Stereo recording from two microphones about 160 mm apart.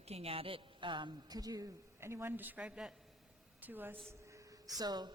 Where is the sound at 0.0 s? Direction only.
40° right (ahead or behind); by 3.9 s 10° right (ahead or behind).